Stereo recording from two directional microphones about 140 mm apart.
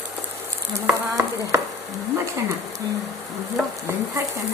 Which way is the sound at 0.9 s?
20° right (ahead or behind).